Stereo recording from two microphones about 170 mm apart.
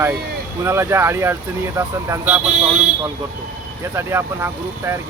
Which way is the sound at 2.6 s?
35° right (ahead or behind).